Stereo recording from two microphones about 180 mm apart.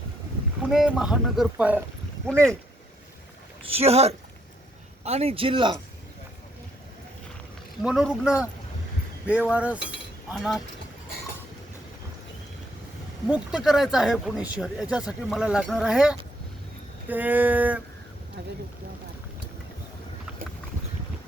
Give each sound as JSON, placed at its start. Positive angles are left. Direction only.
{"t": 0.7, "sound": "speech", "side_deg": 0}
{"t": 3.7, "sound": "speech", "side_deg": -35}
{"t": 7.8, "sound": "speech", "side_deg": -5}
{"t": 13.2, "sound": "speech", "side_deg": -5}
{"t": 18.4, "sound": "speech", "side_deg": -75}